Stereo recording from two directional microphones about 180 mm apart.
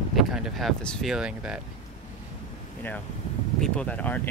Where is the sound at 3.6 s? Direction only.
5° left (ahead or behind).